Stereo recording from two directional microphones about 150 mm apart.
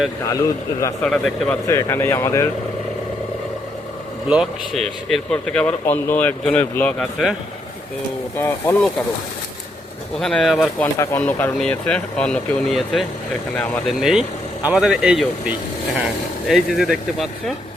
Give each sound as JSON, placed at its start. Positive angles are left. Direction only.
{"t": 0.3, "sound": "a man's voice", "side_deg": 20}
{"t": 1.0, "sound": "speech", "side_deg": 5}
{"t": 1.6, "sound": "speech", "side_deg": 20}
{"t": 4.3, "sound": "speech", "side_deg": -5}
{"t": 8.4, "sound": "speech", "side_deg": 15}
{"t": 10.2, "sound": "speech", "side_deg": 5}
{"t": 11.2, "sound": "speech", "side_deg": 10}
{"t": 14.0, "sound": "speech", "side_deg": -5}